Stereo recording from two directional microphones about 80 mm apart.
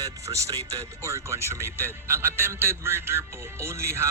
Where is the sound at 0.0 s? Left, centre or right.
Right.